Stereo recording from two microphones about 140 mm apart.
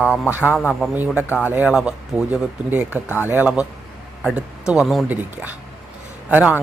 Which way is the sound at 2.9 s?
15° left (ahead or behind).